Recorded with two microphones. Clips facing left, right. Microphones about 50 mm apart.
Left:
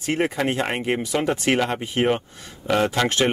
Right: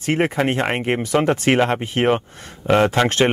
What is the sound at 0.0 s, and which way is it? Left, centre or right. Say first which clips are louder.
Speech: right 3 dB; right.